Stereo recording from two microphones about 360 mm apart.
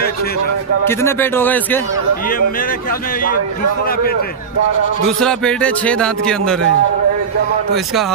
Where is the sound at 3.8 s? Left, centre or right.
Left.